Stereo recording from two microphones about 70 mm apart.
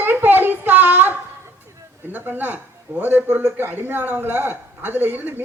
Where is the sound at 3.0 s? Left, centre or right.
Right.